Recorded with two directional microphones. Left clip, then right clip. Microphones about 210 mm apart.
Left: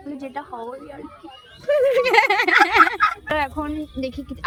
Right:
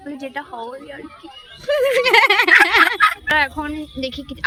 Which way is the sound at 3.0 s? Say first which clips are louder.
Right 5 dB; 10° left (ahead or behind).